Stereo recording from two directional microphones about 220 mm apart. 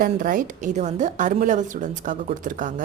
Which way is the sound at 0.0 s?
35° right (ahead or behind).